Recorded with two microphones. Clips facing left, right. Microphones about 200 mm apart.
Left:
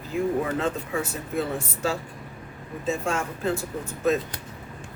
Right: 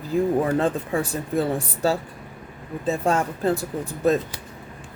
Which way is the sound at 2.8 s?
35° right (ahead or behind).